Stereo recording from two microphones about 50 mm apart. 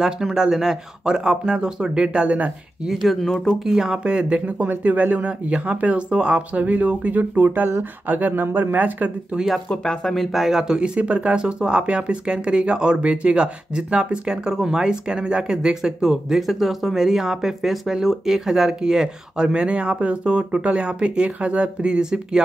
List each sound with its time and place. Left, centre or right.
0.0 s speech: centre
2.9 s speech: centre
3.2 s speech: centre
3.5 s speech: centre
6.6 s speech: right
9.7 s speech: centre
10.1 s speech: centre
11.0 s speech: right